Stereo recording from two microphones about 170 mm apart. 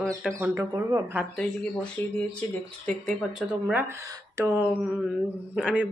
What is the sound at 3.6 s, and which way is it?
Speech, 10° right (ahead or behind).